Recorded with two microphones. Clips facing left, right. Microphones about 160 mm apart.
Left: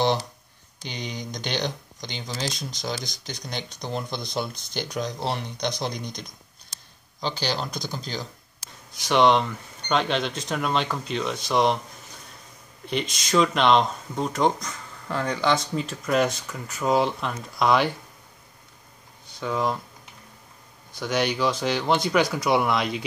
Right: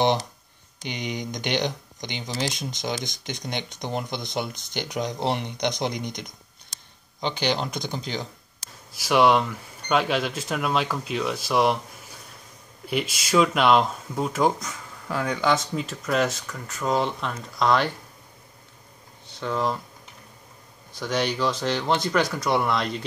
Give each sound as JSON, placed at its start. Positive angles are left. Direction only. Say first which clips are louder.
{"t": 0.0, "sound": "speech", "louder": "right 1 dB", "side_deg": -20}
{"t": 8.9, "sound": "speech", "louder": "even", "side_deg": -5}
{"t": 12.8, "sound": "speech", "louder": "right 1 dB", "side_deg": -5}
{"t": 19.4, "sound": "speech", "louder": "even", "side_deg": 5}
{"t": 21.0, "sound": "speech", "louder": "left 1 dB", "side_deg": 5}